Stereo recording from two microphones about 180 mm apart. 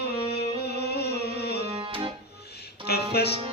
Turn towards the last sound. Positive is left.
turn(degrees=65)  # may be behind; listen again after turning